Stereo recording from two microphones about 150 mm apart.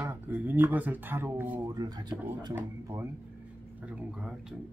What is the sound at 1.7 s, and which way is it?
Speech, 25° right (ahead or behind).